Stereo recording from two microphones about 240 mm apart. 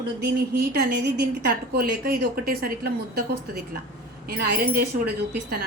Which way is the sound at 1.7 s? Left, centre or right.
Right.